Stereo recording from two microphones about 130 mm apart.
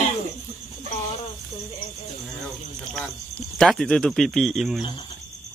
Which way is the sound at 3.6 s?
5° left (ahead or behind).